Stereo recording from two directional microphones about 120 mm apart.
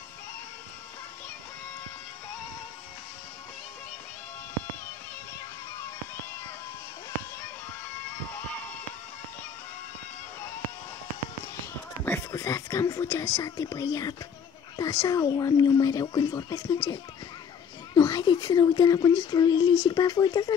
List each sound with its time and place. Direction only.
12.0 s speech: 20° left (ahead or behind)